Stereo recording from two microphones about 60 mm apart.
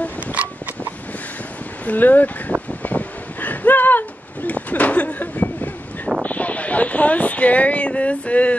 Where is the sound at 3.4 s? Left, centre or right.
Left.